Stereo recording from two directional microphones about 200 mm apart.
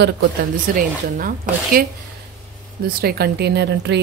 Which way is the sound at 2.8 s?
50° right (ahead or behind).